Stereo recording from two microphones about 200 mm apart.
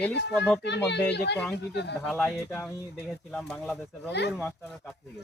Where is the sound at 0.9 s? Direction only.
55° left (ahead or behind).